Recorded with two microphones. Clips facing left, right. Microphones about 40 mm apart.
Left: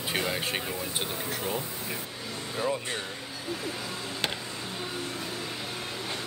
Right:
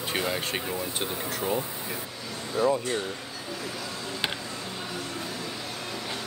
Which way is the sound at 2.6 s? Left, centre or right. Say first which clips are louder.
Right 6 dB; left.